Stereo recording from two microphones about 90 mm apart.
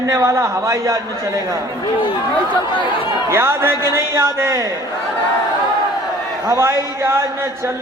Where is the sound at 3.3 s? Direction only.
25° right (ahead or behind).